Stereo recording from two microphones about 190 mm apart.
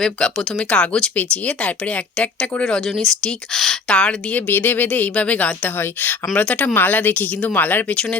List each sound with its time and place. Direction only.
0.0 s speech: 5° left (ahead or behind)